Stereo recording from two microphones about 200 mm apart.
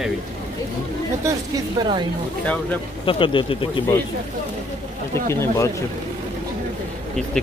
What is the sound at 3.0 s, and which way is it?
Speech, 25° left (ahead or behind).